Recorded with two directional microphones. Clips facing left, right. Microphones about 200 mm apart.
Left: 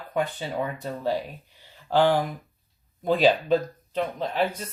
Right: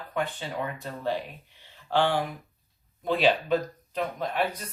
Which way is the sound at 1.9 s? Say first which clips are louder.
Left 4 dB; 40° left (ahead or behind).